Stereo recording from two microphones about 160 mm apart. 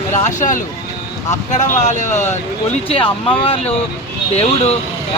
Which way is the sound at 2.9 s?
35° left (ahead or behind).